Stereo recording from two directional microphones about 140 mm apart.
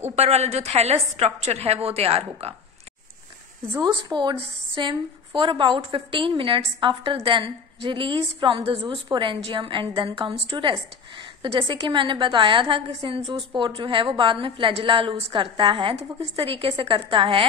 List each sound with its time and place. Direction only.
0.1 s a woman's voice: 50° right (ahead or behind)
3.8 s a woman's voice: 30° right (ahead or behind)